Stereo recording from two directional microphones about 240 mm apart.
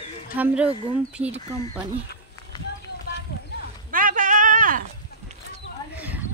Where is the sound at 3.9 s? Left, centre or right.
Right.